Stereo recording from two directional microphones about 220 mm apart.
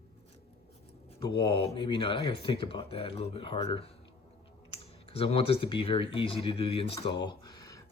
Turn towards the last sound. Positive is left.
turn(degrees=15)  # may be behind; listen again after turning